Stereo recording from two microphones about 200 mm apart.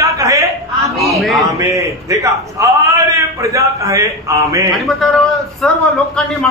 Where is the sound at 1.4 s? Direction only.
15° right (ahead or behind).